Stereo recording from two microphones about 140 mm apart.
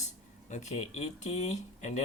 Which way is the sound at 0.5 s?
55° left (ahead or behind).